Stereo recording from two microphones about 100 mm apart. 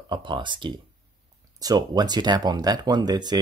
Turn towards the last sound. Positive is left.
turn(degrees=-45)  # may be behind; listen again after turning